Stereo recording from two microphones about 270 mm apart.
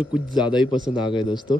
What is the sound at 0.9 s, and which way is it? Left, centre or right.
Speech, centre.